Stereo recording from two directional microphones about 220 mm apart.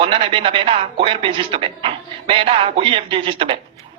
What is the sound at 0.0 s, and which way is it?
Speech, 25° right (ahead or behind).